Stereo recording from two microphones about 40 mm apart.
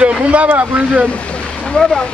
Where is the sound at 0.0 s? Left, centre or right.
Right.